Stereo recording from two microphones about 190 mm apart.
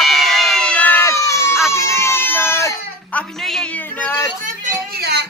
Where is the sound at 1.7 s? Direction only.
15° left (ahead or behind).